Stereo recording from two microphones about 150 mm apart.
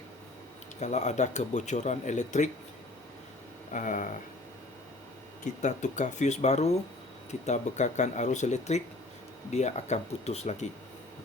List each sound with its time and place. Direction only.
0.8 s speech: 50° left (ahead or behind)
3.7 s speech: 55° left (ahead or behind)
5.6 s speech: 55° left (ahead or behind)